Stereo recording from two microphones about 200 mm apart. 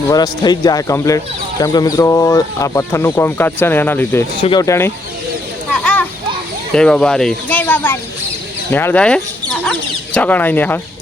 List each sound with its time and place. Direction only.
0.1 s speech: 20° left (ahead or behind)
5.8 s children playing: 5° left (ahead or behind)
6.7 s speech: 5° left (ahead or behind)